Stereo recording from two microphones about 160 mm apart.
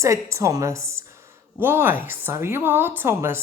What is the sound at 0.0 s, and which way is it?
Speech, 20° right (ahead or behind).